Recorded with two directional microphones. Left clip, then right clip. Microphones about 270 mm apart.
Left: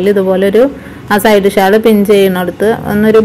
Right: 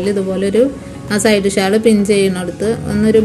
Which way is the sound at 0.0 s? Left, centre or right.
Centre.